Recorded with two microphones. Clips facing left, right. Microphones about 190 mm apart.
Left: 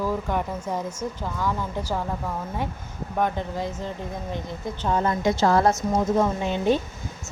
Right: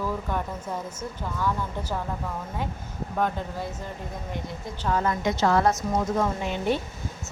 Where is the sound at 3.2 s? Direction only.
15° left (ahead or behind).